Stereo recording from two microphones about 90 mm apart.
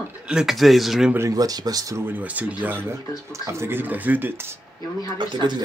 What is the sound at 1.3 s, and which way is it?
Speech, 45° right (ahead or behind).